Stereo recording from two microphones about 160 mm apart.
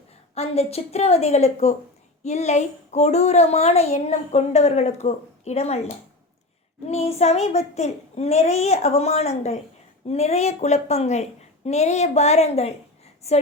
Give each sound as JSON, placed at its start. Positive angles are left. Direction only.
{"t": 0.3, "sound": "a woman's voice", "side_deg": 40}
{"t": 6.8, "sound": "a woman's voice", "side_deg": 40}